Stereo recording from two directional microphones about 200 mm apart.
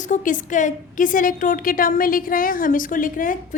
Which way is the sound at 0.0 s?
40° left (ahead or behind).